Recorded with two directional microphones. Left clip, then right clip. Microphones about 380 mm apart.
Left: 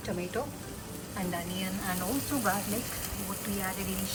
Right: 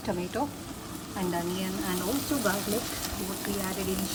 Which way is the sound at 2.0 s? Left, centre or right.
Centre.